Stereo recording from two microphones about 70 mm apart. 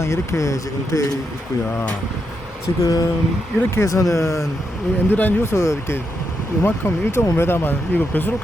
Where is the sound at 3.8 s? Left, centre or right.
Left.